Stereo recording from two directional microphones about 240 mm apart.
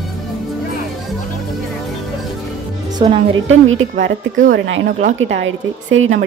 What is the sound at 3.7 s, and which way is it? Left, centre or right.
Speech, right.